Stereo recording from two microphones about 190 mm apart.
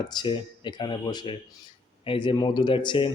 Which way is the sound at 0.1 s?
25° left (ahead or behind).